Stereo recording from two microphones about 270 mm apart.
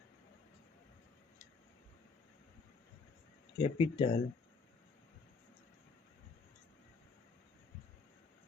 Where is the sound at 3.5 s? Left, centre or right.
Centre.